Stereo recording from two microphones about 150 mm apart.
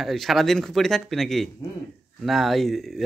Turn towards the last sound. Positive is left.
turn(degrees=0)  # may be behind; listen again after turning